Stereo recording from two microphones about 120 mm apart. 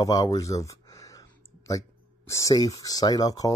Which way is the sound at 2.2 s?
25° left (ahead or behind).